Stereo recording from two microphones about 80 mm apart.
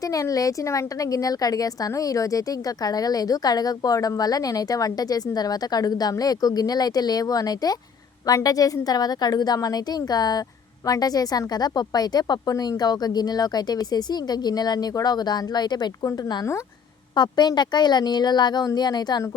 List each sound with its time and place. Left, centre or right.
0.0 s a woman's voice: left
16.0 s a woman's voice: left
17.2 s a woman's voice: left